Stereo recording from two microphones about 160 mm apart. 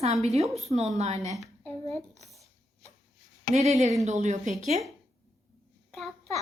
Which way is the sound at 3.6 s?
45° right (ahead or behind).